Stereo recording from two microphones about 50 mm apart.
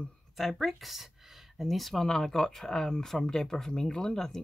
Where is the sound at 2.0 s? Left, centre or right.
Centre.